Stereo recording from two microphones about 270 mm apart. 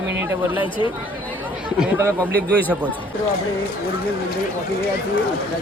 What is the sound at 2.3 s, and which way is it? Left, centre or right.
Speech, centre.